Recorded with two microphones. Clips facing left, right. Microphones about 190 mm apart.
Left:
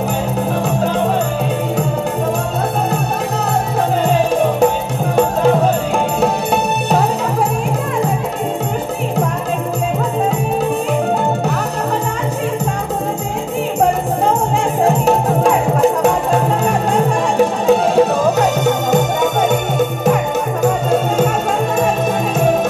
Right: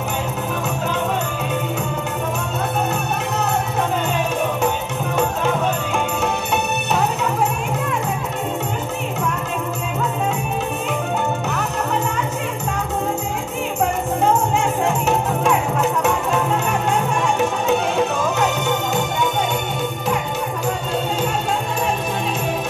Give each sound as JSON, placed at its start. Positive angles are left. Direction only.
{"t": 4.1, "sound": "music", "side_deg": 35}
{"t": 14.9, "sound": "music", "side_deg": 35}
{"t": 20.6, "sound": "music", "side_deg": 45}